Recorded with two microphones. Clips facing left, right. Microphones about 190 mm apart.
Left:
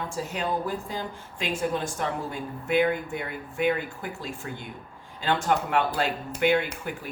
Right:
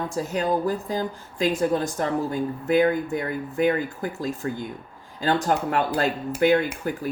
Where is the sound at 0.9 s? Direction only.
40° right (ahead or behind).